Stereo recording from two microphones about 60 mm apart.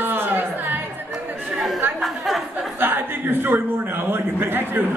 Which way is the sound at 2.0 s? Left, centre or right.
Centre.